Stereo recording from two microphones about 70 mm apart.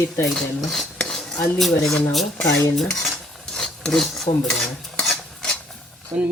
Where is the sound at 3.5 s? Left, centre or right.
Centre.